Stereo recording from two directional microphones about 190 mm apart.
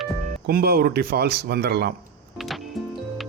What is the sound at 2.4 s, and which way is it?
Music, centre (ahead or behind).